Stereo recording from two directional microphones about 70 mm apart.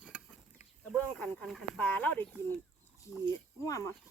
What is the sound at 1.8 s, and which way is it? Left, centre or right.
Speech, left.